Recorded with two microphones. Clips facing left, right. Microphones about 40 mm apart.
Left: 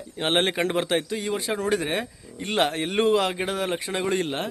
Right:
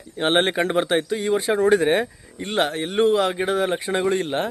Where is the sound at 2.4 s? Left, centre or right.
Centre.